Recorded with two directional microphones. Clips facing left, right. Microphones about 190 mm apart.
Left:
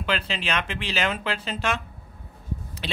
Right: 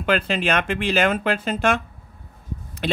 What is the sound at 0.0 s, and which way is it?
A man's voice, 50° right (ahead or behind).